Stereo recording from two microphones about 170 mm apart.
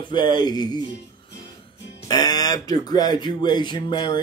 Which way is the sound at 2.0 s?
25° left (ahead or behind).